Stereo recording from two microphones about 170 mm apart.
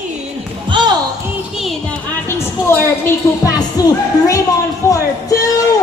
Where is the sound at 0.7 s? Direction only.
25° right (ahead or behind).